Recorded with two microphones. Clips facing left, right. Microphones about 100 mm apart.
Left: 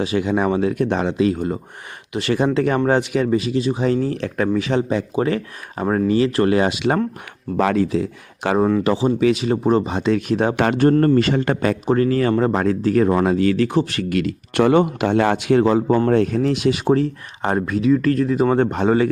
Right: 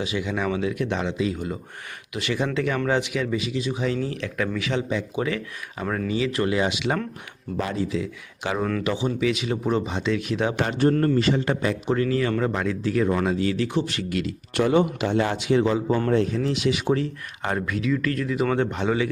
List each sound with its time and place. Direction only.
0.0 s speech: 45° left (ahead or behind)
6.1 s speech: 55° left (ahead or behind)
7.5 s speech: 80° left
7.9 s speech: 50° left (ahead or behind)
10.6 s a man's voice: 65° left (ahead or behind)
11.9 s a man's voice: 40° left (ahead or behind)
16.8 s speech: 35° left (ahead or behind)